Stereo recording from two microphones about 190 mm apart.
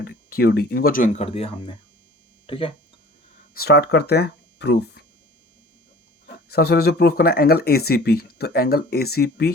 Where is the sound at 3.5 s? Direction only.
55° left (ahead or behind).